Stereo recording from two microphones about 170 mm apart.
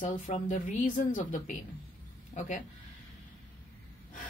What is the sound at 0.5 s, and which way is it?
Speech, 45° left (ahead or behind).